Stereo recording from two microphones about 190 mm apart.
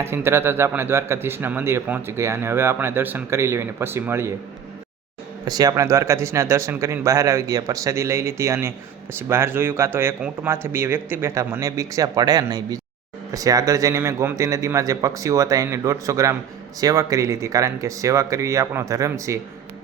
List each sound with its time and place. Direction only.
0.0 s speech: 10° right (ahead or behind)
5.5 s speech: 20° right (ahead or behind)